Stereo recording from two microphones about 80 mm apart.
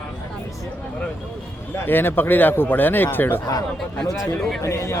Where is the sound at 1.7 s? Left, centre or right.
Left.